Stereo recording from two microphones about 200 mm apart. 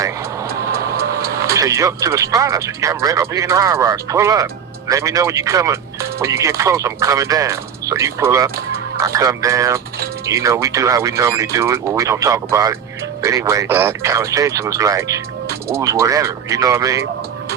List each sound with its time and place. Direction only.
0.9 s music: 15° right (ahead or behind)
1.5 s speech: 15° right (ahead or behind)